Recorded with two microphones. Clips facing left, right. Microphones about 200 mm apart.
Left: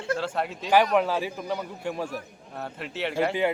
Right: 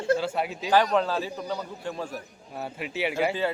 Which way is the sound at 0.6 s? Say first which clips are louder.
Left 1 dB; 15° left (ahead or behind).